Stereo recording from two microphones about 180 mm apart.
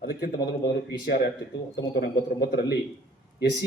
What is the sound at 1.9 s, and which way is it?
Speech, 60° left (ahead or behind).